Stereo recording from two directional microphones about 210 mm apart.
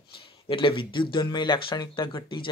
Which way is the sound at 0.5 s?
25° left (ahead or behind).